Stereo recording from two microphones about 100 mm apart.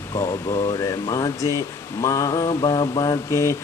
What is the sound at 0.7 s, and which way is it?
Mantra, 40° left (ahead or behind).